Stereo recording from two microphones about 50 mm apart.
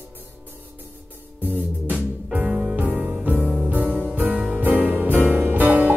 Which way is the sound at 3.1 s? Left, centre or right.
Right.